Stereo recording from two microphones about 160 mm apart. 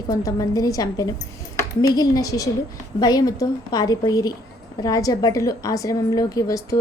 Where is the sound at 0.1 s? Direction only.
20° left (ahead or behind).